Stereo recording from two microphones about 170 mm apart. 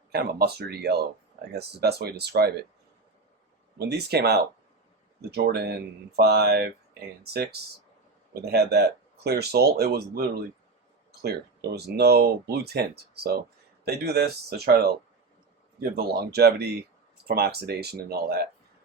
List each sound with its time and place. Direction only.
0.1 s speech: 70° right (ahead or behind)
3.8 s speech: 70° right (ahead or behind)
6.1 s speech: 70° right (ahead or behind)
8.3 s speech: 70° right (ahead or behind)